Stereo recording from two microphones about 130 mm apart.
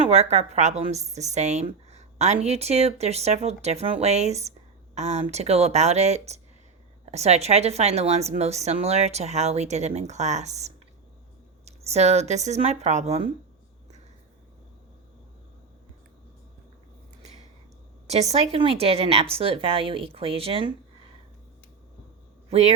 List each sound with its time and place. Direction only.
0.0 s a woman's voice: 55° right (ahead or behind)
11.9 s a woman's voice: 55° right (ahead or behind)
18.1 s a woman's voice: 55° right (ahead or behind)
22.4 s speech: 55° right (ahead or behind)